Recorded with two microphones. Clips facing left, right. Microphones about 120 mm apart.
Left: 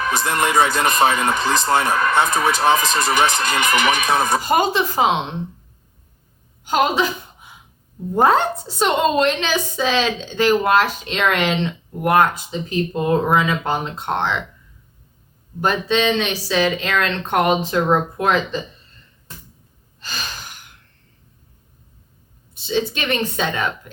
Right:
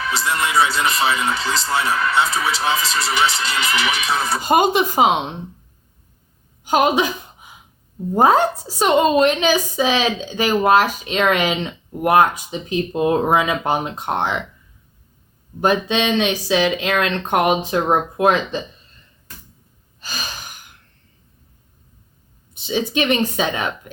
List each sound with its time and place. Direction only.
0.0 s speech: 50° left (ahead or behind)
4.4 s speech: 20° right (ahead or behind)
6.7 s speech: 15° right (ahead or behind)
8.1 s speech: 10° right (ahead or behind)
12.3 s speech: 15° right (ahead or behind)
15.6 s speech: 15° right (ahead or behind)
20.0 s gasp: 10° right (ahead or behind)
22.5 s speech: 15° right (ahead or behind)